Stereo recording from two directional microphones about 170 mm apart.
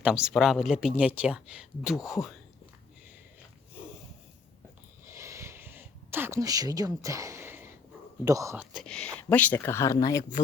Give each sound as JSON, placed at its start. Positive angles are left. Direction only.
{"t": 0.0, "sound": "speech", "side_deg": -5}
{"t": 5.0, "sound": "a sound", "side_deg": -15}
{"t": 8.2, "sound": "speech", "side_deg": -20}
{"t": 8.7, "sound": "speech", "side_deg": 5}